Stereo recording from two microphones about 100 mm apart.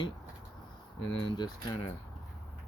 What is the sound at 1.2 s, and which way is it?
Speech, 50° left (ahead or behind).